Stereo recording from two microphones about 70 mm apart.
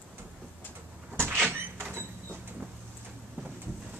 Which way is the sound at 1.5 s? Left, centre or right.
Right.